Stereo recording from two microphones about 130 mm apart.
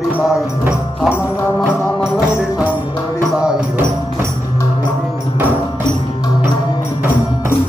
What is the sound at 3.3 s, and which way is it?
Music, 5° right (ahead or behind).